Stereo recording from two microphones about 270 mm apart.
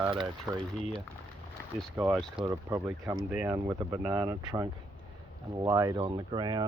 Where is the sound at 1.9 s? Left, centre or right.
Centre.